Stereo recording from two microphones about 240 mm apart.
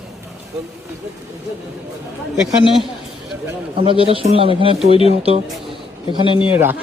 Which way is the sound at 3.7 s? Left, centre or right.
Right.